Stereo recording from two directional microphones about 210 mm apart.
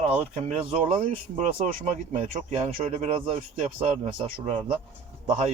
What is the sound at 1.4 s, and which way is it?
Speech, 35° right (ahead or behind).